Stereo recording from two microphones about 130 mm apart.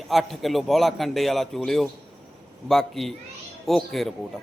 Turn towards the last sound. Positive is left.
turn(degrees=0)  # may be behind; listen again after turning